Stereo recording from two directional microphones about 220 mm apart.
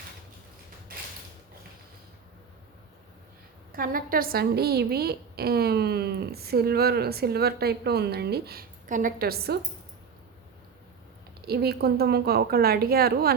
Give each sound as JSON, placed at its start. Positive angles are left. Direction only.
{"t": 0.9, "sound": "a sound", "side_deg": -40}
{"t": 3.7, "sound": "a woman's voice", "side_deg": -40}
{"t": 11.4, "sound": "a woman's voice", "side_deg": -45}